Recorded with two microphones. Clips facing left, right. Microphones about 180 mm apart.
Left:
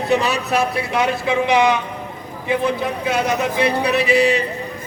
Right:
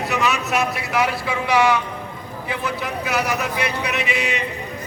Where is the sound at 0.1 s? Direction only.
30° left (ahead or behind).